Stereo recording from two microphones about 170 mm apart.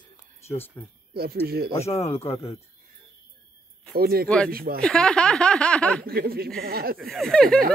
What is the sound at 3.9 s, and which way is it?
Speech, 65° right (ahead or behind).